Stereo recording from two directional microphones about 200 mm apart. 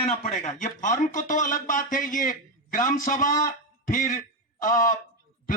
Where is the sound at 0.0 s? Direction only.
35° left (ahead or behind).